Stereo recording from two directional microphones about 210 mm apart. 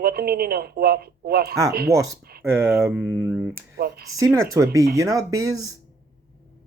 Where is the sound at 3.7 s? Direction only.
50° right (ahead or behind).